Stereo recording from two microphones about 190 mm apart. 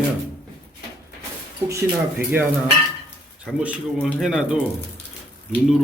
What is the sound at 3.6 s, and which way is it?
Speech, 5° right (ahead or behind).